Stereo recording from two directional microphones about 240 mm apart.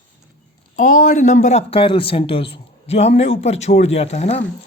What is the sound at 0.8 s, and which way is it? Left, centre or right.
A man's voice, left.